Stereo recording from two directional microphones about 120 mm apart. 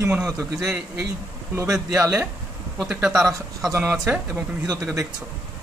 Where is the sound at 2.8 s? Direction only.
5° right (ahead or behind).